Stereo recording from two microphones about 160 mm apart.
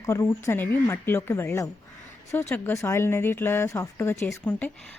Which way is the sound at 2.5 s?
15° left (ahead or behind).